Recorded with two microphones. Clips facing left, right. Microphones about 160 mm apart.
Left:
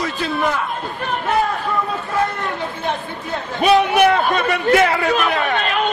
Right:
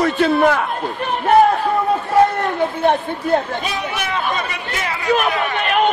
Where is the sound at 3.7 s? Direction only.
65° left (ahead or behind).